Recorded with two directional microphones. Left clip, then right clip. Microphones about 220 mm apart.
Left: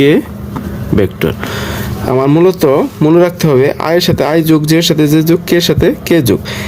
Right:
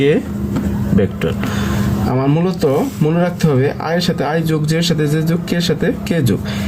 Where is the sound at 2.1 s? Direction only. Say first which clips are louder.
Left 10 dB; 45° left (ahead or behind).